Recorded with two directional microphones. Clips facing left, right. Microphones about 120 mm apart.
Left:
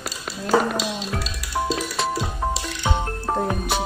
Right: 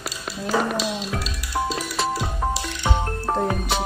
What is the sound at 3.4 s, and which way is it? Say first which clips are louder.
Music: even; centre (ahead or behind).